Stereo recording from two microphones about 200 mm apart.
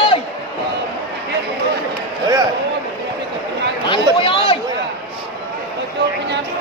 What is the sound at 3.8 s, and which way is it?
Chatter, 25° left (ahead or behind).